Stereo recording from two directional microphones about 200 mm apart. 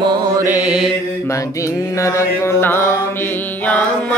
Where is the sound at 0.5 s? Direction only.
5° right (ahead or behind).